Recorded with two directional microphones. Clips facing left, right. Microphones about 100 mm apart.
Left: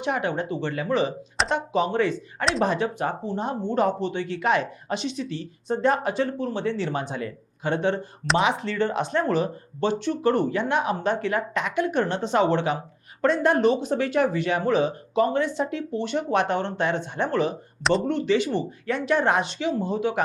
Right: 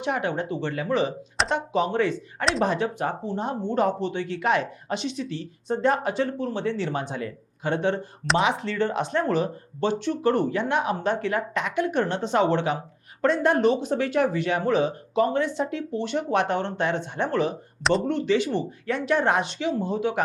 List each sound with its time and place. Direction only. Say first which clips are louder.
0.0 s speech: left 1 dB; 20° left (ahead or behind)
2.4 s speech: even; centre (ahead or behind)
2.6 s speech: even; 20° left (ahead or behind)